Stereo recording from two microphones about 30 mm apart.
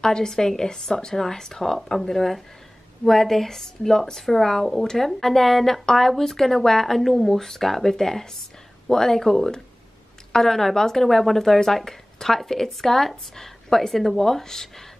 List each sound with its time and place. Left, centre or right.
0.0 s a woman's voice: left